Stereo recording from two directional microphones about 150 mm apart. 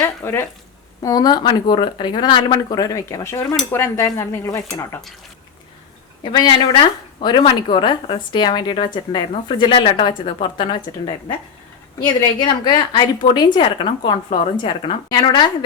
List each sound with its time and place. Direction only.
0.0 s speech: 20° left (ahead or behind)
6.2 s speech: 30° left (ahead or behind)